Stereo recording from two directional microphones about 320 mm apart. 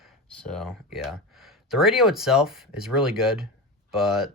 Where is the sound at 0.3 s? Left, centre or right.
Centre.